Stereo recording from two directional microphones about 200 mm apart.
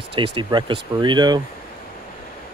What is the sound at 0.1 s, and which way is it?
Speech, 25° right (ahead or behind).